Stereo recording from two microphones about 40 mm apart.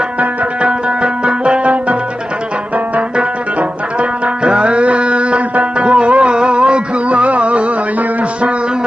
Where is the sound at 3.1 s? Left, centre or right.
Right.